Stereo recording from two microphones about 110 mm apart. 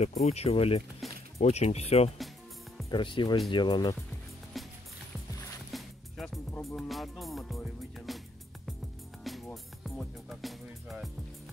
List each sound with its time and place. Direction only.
0.0 s speech: 75° left (ahead or behind); by 0.8 s 60° left (ahead or behind)
1.4 s speech: 80° left
2.9 s speech: 45° left (ahead or behind)
4.6 s music: centre (ahead or behind)